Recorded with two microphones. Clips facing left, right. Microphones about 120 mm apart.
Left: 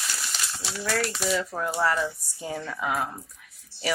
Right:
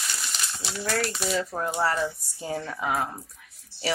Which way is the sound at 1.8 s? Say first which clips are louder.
Left 1 dB; 30° right (ahead or behind).